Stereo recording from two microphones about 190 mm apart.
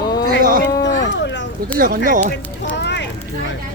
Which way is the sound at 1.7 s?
50° right (ahead or behind).